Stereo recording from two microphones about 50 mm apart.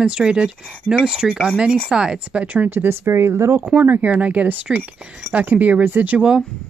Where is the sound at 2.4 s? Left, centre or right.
Right.